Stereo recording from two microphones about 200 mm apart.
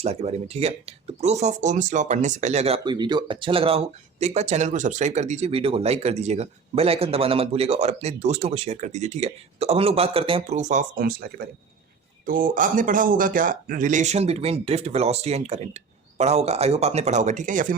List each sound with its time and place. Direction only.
0.0 s speech: 30° right (ahead or behind)